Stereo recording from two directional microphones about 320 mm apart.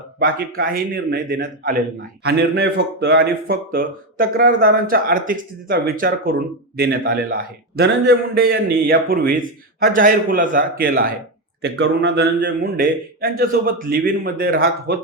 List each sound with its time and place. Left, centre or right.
0.2 s speech: right